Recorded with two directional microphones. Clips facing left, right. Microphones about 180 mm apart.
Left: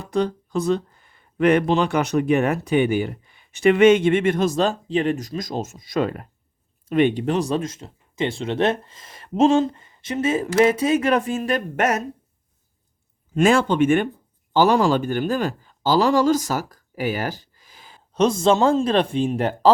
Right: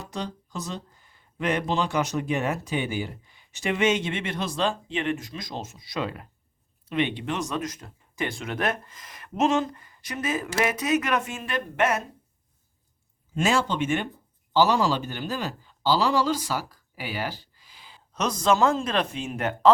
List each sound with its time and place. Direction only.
0.0 s a man's voice: 55° left (ahead or behind)
13.3 s speech: 55° left (ahead or behind)
18.1 s a man's voice: 30° left (ahead or behind)